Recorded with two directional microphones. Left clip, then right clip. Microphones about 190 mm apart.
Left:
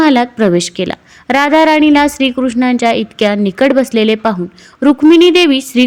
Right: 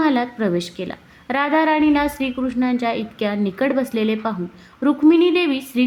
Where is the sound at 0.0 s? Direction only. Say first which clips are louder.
Left 9 dB; 35° left (ahead or behind).